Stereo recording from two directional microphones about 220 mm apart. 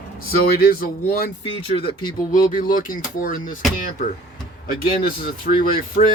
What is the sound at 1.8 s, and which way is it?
Speech, 25° left (ahead or behind).